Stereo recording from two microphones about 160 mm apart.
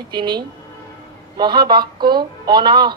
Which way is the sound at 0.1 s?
25° right (ahead or behind).